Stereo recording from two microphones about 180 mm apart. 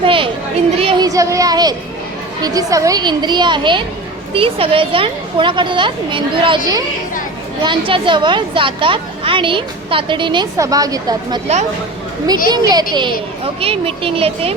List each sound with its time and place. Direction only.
0.0 s speech: 30° right (ahead or behind)
12.5 s speech: 20° right (ahead or behind)